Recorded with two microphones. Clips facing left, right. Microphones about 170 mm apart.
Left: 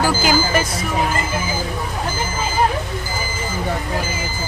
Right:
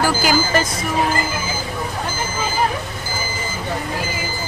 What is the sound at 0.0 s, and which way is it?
Vehicle, 15° left (ahead or behind).